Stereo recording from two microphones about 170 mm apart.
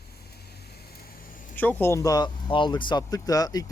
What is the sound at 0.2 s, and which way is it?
Vehicle, 70° left (ahead or behind).